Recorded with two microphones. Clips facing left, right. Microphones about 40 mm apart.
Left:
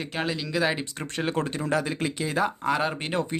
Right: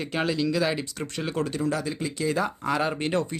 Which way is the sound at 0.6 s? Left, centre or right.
Left.